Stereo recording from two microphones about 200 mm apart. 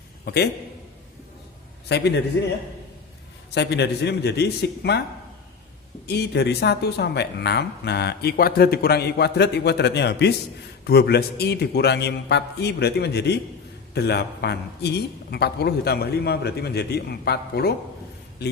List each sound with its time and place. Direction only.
1.9 s speech: 55° left (ahead or behind)
3.5 s speech: 60° left (ahead or behind)
6.1 s speech: 55° left (ahead or behind)